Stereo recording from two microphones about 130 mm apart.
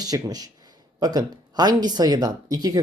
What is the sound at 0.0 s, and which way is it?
Speech, 30° right (ahead or behind).